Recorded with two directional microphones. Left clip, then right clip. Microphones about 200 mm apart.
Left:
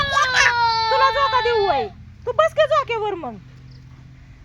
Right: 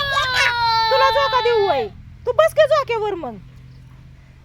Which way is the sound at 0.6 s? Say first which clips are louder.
Right 1 dB; 60° right (ahead or behind).